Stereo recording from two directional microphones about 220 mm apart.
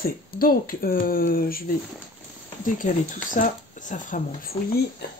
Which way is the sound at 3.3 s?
35° left (ahead or behind).